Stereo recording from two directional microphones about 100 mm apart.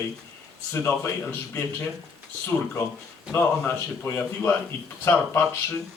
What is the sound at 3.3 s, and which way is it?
A man's voice, 20° left (ahead or behind).